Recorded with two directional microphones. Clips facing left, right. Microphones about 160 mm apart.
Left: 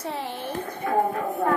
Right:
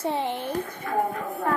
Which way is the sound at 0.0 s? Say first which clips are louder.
Right 5 dB; 25° right (ahead or behind).